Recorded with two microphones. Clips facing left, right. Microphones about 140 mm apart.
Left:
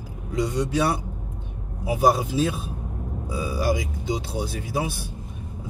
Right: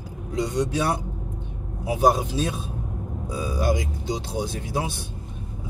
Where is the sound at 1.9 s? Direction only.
5° left (ahead or behind).